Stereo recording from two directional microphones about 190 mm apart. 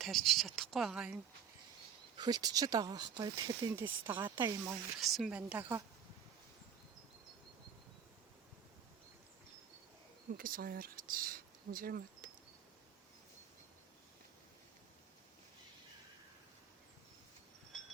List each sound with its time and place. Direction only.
0.0 s speech: centre (ahead or behind)
2.1 s speech: 20° right (ahead or behind)
4.9 s a woman's voice: centre (ahead or behind)
10.3 s speech: 50° right (ahead or behind)